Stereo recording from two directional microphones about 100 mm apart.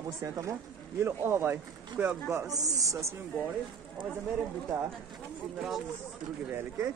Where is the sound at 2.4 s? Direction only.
35° right (ahead or behind).